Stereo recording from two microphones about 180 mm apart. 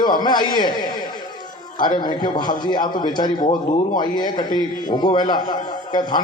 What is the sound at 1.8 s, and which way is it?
A man's voice, 25° left (ahead or behind).